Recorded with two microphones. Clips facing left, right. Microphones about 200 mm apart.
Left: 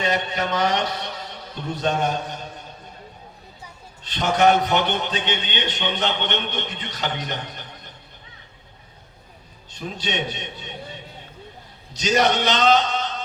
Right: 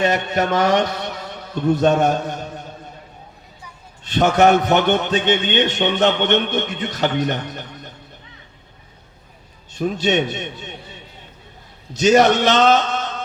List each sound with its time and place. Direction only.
0.0 s a man's voice: 45° right (ahead or behind)
4.1 s a man's voice: 45° right (ahead or behind)
9.7 s a man's voice: 45° right (ahead or behind)
11.9 s a man's voice: 45° right (ahead or behind)